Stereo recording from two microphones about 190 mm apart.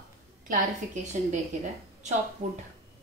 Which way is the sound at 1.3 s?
40° right (ahead or behind).